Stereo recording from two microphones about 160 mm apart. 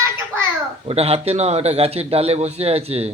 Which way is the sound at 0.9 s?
40° right (ahead or behind).